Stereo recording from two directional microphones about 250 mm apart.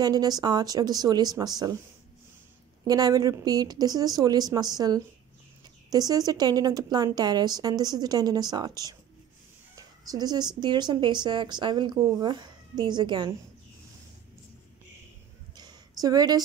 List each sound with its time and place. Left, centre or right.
0.0 s a woman's voice: centre
2.9 s a woman's voice: centre
16.0 s a woman's voice: centre